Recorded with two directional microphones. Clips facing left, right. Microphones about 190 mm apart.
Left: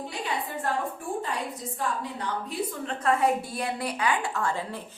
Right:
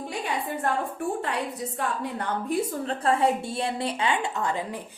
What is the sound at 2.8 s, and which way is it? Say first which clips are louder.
A woman's voice: even; 30° right (ahead or behind).